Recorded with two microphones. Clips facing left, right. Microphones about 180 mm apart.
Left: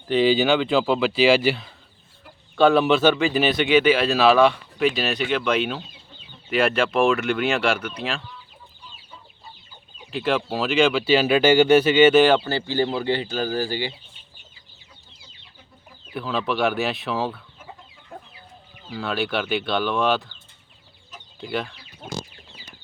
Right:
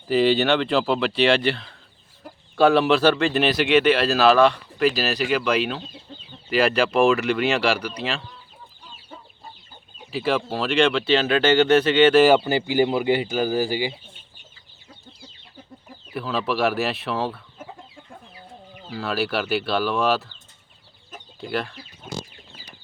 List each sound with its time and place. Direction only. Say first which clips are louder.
0.1 s speech: even; centre (ahead or behind)
10.1 s speech: even; centre (ahead or behind)
12.2 s speech: right 2 dB; 10° right (ahead or behind)
16.1 s speech: even; centre (ahead or behind)
18.9 s speech: even; centre (ahead or behind)
21.4 s speech: right 1 dB; centre (ahead or behind)